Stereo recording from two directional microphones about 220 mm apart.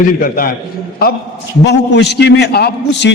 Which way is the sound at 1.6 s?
50° left (ahead or behind).